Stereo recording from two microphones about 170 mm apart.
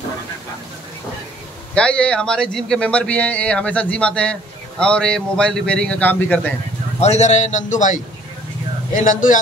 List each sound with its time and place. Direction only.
1.8 s speech: 5° left (ahead or behind)
7.0 s a man's voice: 40° left (ahead or behind)